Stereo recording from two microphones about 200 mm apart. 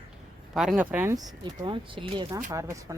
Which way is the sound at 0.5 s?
5° right (ahead or behind).